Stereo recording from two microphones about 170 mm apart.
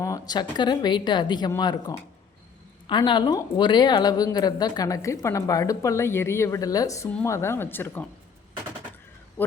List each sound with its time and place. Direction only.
0.0 s speech: 20° left (ahead or behind)